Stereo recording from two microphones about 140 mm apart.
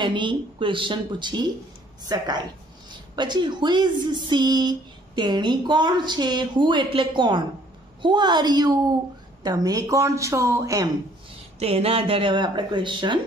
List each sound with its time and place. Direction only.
0.0 s a woman's voice: 35° right (ahead or behind)
11.6 s a woman's voice: 45° right (ahead or behind)